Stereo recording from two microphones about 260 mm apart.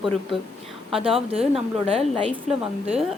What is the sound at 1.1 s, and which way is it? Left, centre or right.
Speech, right.